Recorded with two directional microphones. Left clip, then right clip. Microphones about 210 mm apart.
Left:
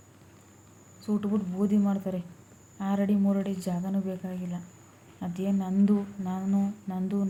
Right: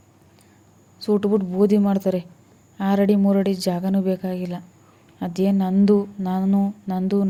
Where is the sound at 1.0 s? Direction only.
40° right (ahead or behind).